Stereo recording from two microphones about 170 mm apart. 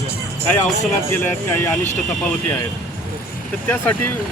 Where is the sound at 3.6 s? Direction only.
10° left (ahead or behind).